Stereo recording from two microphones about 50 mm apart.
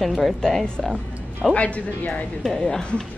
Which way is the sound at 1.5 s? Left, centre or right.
Left.